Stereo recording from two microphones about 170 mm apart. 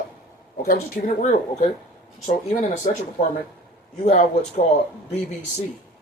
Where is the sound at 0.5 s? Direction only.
55° left (ahead or behind).